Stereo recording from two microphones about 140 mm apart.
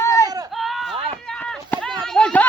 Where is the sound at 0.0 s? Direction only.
20° left (ahead or behind).